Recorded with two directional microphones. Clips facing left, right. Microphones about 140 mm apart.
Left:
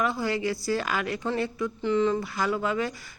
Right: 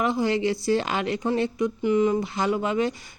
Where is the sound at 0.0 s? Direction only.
20° right (ahead or behind).